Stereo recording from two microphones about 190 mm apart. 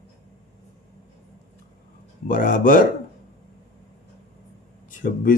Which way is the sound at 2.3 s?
45° left (ahead or behind).